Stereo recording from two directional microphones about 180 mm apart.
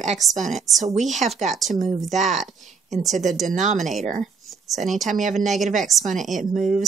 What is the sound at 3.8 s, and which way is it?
Speech, centre (ahead or behind).